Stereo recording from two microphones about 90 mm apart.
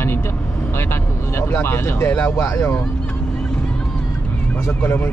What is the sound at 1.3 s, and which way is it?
Speech, 25° left (ahead or behind).